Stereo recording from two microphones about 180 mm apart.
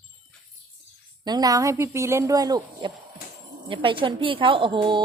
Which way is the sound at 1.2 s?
20° right (ahead or behind).